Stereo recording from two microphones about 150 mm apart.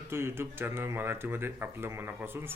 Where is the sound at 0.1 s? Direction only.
15° right (ahead or behind).